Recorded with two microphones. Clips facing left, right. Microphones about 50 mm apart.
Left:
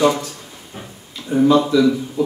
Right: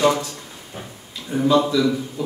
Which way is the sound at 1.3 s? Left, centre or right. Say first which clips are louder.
Left 4 dB; centre.